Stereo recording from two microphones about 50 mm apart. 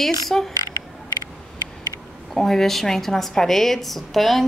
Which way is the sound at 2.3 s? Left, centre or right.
Centre.